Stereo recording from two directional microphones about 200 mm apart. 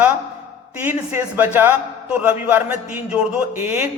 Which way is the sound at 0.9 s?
10° right (ahead or behind).